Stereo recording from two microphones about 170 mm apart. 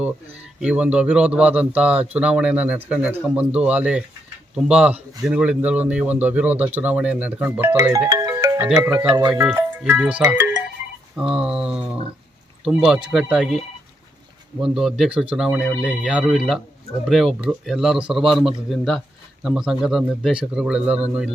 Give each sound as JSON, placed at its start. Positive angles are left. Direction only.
{"t": 0.6, "sound": "a man's voice", "side_deg": -5}
{"t": 8.1, "sound": "music", "side_deg": -20}
{"t": 8.6, "sound": "a man's voice", "side_deg": -10}
{"t": 14.6, "sound": "speech", "side_deg": 0}